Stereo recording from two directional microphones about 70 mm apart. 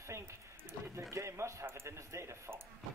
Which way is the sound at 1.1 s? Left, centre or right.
Right.